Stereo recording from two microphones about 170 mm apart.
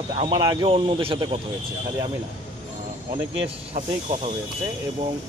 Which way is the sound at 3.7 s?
40° right (ahead or behind).